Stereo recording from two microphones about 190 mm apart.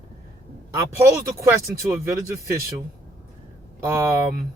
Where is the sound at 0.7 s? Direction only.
15° right (ahead or behind).